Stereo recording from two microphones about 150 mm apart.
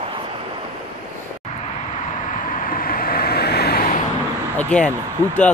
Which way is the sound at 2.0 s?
55° left (ahead or behind).